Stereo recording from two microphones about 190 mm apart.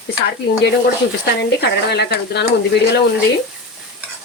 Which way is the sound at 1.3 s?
60° left (ahead or behind).